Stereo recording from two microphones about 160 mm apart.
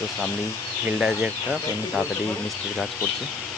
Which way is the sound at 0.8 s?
5° right (ahead or behind).